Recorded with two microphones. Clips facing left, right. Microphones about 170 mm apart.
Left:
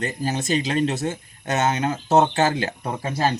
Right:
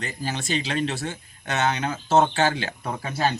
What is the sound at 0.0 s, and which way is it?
Speech, 45° left (ahead or behind).